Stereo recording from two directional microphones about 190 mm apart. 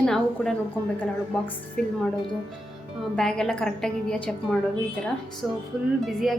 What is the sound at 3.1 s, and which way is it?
A woman's voice, 5° left (ahead or behind).